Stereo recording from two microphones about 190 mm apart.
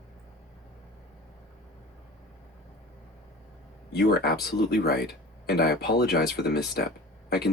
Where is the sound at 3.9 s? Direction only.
55° left (ahead or behind).